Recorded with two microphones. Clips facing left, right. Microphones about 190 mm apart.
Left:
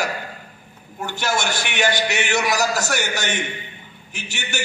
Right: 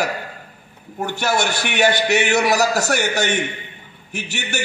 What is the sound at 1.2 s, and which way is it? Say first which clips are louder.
A man's voice: right 2 dB; 60° right (ahead or behind).